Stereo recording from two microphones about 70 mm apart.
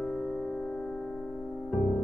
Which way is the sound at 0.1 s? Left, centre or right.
Centre.